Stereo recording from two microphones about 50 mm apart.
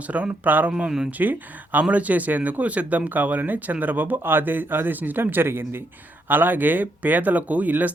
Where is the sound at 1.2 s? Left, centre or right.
Right.